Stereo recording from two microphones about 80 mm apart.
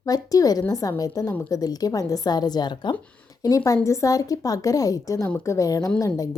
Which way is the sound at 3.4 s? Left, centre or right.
Left.